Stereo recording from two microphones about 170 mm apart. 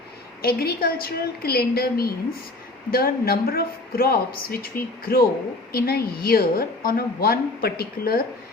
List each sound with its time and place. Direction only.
0.4 s a woman's voice: 65° left (ahead or behind)